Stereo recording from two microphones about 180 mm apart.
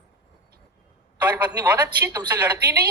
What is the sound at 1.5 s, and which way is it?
Speech, 10° right (ahead or behind).